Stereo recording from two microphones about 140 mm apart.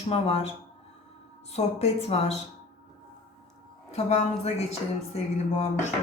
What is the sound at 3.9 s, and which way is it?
A woman's voice, 50° left (ahead or behind).